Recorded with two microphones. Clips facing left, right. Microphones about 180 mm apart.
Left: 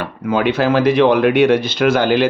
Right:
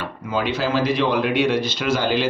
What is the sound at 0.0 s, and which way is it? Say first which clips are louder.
Speech: left 7 dB; 60° left (ahead or behind).